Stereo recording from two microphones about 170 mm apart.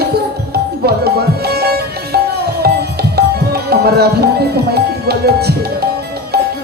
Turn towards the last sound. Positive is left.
turn(degrees=-70)  # may be behind; listen again after turning